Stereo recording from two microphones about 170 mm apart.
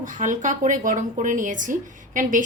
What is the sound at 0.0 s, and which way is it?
A woman's voice, 50° right (ahead or behind).